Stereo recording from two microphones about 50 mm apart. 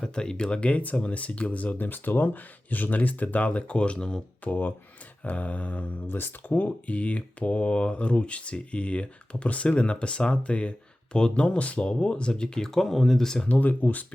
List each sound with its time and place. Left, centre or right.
0.0 s speech: centre
4.4 s speech: left
6.1 s speech: left
6.7 s speech: left; by 13.4 s centre
13.4 s speech: left